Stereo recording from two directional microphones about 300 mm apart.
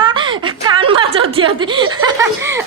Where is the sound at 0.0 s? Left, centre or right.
Centre.